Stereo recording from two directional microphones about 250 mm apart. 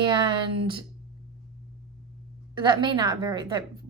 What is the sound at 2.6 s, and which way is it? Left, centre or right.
A woman's voice, centre.